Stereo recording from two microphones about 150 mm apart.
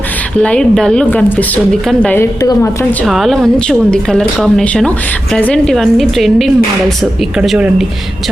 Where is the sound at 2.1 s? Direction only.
20° left (ahead or behind).